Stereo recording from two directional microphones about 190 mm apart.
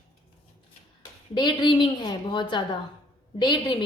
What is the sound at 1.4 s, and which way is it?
A woman's voice, 25° left (ahead or behind).